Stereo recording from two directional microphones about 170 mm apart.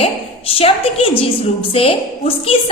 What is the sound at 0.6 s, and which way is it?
A woman's voice, 35° left (ahead or behind).